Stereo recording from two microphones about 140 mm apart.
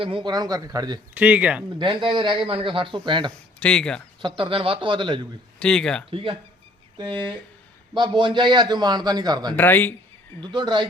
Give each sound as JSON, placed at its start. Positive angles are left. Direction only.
{"t": 0.0, "sound": "speech", "side_deg": -35}
{"t": 1.1, "sound": "speech", "side_deg": -10}
{"t": 1.8, "sound": "a man's voice", "side_deg": -35}
{"t": 3.6, "sound": "speech", "side_deg": 5}
{"t": 4.4, "sound": "a man's voice", "side_deg": -40}
{"t": 5.5, "sound": "speech", "side_deg": 5}
{"t": 6.1, "sound": "a man's voice", "side_deg": -40}
{"t": 7.9, "sound": "a man's voice", "side_deg": -35}
{"t": 9.6, "sound": "speech", "side_deg": 15}
{"t": 10.4, "sound": "a man's voice", "side_deg": -35}